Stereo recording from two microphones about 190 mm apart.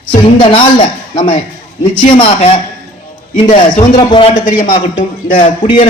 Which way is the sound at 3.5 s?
40° left (ahead or behind).